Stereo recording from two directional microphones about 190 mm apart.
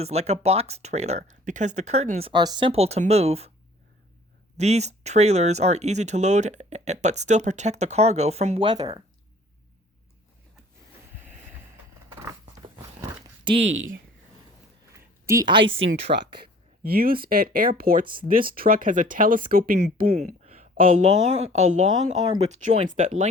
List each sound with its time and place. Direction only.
0.0 s speech: 35° right (ahead or behind)
4.5 s speech: 35° right (ahead or behind)
12.2 s a sound: 15° right (ahead or behind)
13.6 s speech: 85° right
15.3 s a woman's voice: 20° right (ahead or behind)
15.8 s speech: 80° right
16.8 s speech: 50° right (ahead or behind)